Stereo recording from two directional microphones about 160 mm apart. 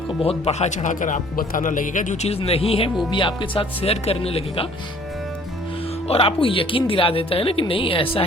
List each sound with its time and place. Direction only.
0.2 s speech: 40° left (ahead or behind)
6.1 s speech: 35° left (ahead or behind)